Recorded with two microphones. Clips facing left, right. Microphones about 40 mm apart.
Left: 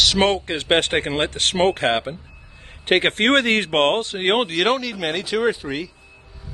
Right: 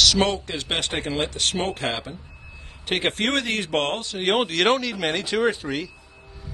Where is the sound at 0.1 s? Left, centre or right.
Left.